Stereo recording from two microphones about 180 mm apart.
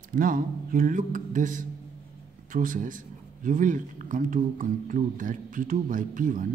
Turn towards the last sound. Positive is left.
turn(degrees=-45)  # may be behind; listen again after turning